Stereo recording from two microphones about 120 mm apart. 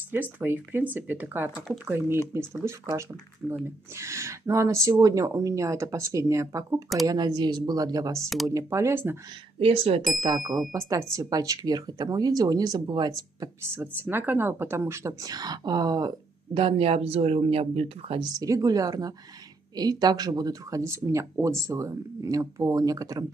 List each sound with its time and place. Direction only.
0.1 s speech: 15° right (ahead or behind)
8.2 s speech: centre (ahead or behind)
8.5 s speech: 25° right (ahead or behind)
9.6 s speech: 55° right (ahead or behind)
10.2 s speech: 30° right (ahead or behind)
13.7 s speech: 15° right (ahead or behind); by 16.1 s 35° right (ahead or behind)
16.5 s speech: 50° right (ahead or behind)
18.2 s speech: 30° right (ahead or behind)